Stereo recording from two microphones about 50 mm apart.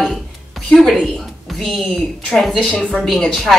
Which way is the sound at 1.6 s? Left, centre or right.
Centre.